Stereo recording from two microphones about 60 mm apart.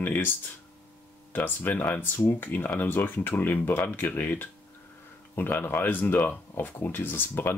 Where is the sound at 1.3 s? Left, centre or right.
Left.